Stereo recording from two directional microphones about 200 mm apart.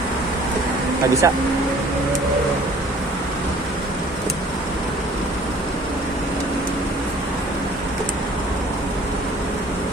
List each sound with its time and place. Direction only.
1.2 s speech: 15° right (ahead or behind)